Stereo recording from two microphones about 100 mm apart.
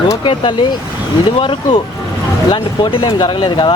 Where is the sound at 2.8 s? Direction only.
55° left (ahead or behind).